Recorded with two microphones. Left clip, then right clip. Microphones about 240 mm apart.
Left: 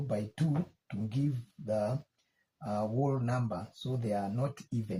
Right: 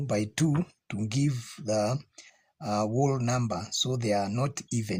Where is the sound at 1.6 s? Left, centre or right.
Right.